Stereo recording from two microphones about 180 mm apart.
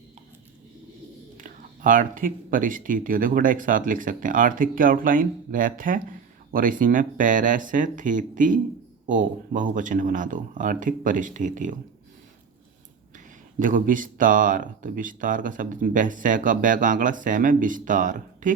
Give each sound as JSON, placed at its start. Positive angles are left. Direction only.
{"t": 1.4, "sound": "speech", "side_deg": -50}
{"t": 13.1, "sound": "speech", "side_deg": -50}